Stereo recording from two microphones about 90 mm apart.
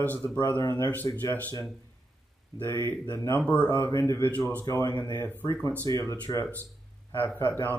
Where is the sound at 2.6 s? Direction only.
25° left (ahead or behind).